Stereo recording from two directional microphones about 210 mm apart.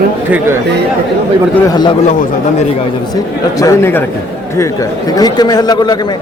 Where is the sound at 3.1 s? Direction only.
15° left (ahead or behind).